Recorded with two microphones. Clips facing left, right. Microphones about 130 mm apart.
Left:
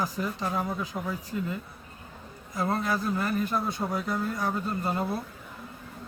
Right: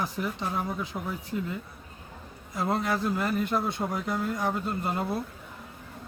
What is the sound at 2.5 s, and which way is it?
A man's voice, 25° right (ahead or behind).